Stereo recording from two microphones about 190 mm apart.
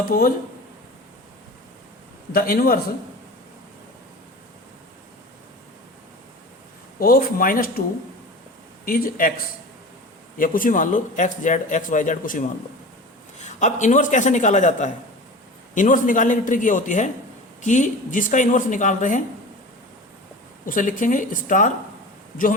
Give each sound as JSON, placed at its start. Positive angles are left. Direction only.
{"t": 0.1, "sound": "a man's voice", "side_deg": 50}
{"t": 2.3, "sound": "a man's voice", "side_deg": 50}
{"t": 7.0, "sound": "a man's voice", "side_deg": 50}
{"t": 10.3, "sound": "a man's voice", "side_deg": 45}
{"t": 20.7, "sound": "a man's voice", "side_deg": 45}